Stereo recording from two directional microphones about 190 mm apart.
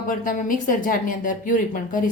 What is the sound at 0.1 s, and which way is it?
A woman's voice, 45° left (ahead or behind).